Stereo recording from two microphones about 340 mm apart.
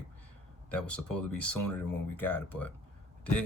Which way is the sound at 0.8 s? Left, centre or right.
Left.